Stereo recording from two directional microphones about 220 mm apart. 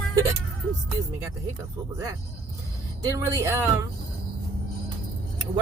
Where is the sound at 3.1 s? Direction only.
10° right (ahead or behind).